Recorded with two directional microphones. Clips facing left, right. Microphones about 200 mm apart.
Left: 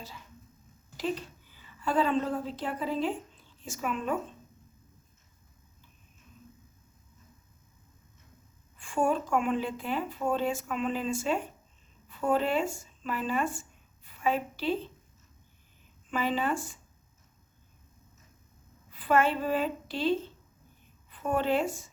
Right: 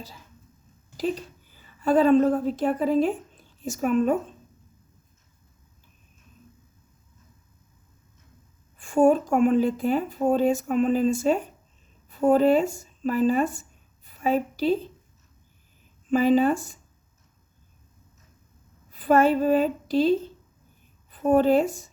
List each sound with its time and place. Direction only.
1.5 s a woman's voice: 45° right (ahead or behind)
8.8 s speech: 40° right (ahead or behind)
16.0 s speech: 40° right (ahead or behind)
18.9 s a woman's voice: 40° right (ahead or behind)